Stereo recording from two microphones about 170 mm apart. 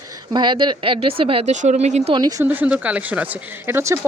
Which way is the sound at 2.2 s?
20° right (ahead or behind).